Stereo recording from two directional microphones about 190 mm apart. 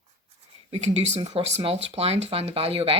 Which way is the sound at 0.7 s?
35° right (ahead or behind).